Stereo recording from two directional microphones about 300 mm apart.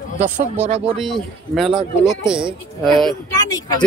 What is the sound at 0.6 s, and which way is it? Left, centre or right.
Speech, right.